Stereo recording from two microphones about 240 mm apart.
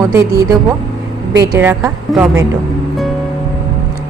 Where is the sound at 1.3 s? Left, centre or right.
Centre.